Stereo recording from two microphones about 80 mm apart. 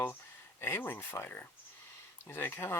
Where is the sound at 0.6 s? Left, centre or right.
Left.